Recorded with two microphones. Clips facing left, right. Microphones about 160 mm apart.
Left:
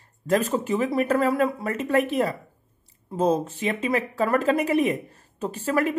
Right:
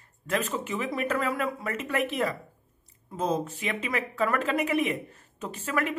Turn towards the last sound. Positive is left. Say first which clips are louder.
# left 6 dB
turn(degrees=35)  # may be behind; listen again after turning